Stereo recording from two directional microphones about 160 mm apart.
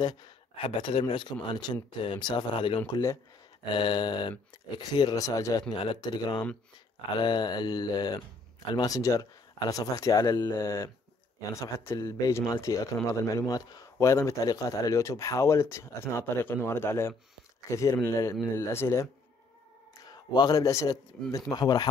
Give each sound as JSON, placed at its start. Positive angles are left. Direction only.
{"t": 0.6, "sound": "speech", "side_deg": 35}
{"t": 20.1, "sound": "speech", "side_deg": 25}